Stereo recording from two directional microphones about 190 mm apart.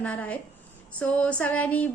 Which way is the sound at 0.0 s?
5° left (ahead or behind).